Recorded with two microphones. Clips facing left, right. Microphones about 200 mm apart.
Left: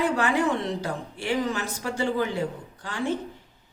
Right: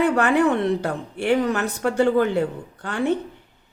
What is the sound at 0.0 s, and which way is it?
Speech, 60° right (ahead or behind).